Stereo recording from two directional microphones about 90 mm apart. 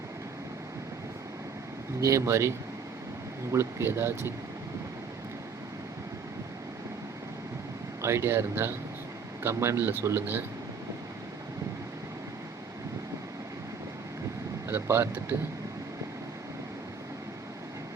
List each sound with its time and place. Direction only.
2.0 s speech: 35° right (ahead or behind)
3.5 s speech: 30° right (ahead or behind)
8.0 s speech: 30° right (ahead or behind)
14.7 s speech: 30° right (ahead or behind)